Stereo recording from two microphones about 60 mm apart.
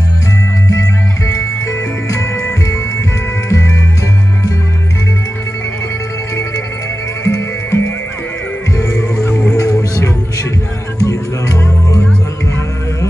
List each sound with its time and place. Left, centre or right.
0.7 s music: left
7.2 s music: left